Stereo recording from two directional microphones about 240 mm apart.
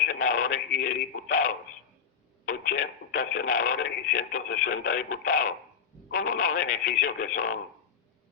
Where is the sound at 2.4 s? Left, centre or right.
Left.